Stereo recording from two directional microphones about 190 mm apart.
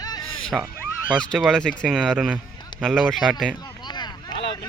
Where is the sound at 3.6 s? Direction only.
20° left (ahead or behind).